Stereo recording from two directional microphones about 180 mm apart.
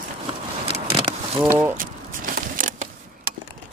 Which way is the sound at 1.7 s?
50° right (ahead or behind).